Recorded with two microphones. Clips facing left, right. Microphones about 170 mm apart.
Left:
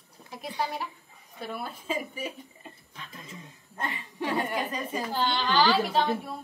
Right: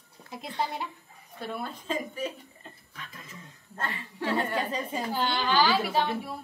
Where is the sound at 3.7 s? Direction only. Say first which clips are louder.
Left 1 dB; 15° left (ahead or behind).